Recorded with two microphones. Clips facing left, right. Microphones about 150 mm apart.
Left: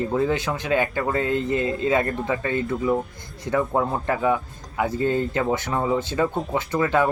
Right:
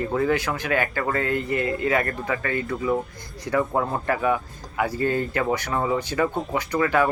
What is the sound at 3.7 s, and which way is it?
Speech, 15° left (ahead or behind).